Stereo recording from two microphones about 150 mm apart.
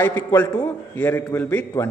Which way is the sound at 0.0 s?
15° left (ahead or behind).